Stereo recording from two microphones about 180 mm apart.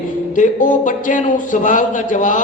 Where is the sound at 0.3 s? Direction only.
45° left (ahead or behind).